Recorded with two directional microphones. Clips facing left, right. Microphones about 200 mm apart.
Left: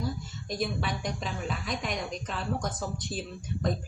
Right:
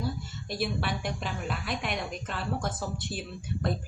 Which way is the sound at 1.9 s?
5° right (ahead or behind).